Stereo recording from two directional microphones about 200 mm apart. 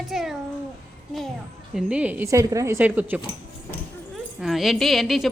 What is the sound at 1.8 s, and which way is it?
A woman's voice, 5° right (ahead or behind).